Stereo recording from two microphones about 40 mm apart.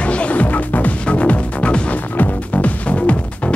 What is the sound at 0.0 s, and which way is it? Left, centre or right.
Music, left.